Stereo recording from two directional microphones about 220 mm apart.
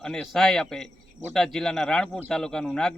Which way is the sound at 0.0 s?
Centre (ahead or behind).